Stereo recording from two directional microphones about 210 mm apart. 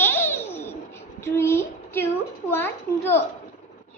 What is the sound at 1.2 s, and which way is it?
Child singing, 10° left (ahead or behind).